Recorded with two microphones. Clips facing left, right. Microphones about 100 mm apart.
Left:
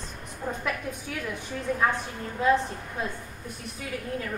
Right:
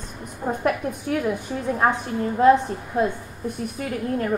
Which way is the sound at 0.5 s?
50° right (ahead or behind).